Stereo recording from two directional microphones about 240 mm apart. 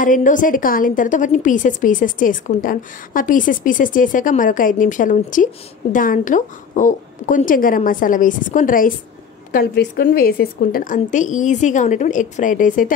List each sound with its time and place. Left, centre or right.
0.0 s a woman's voice: left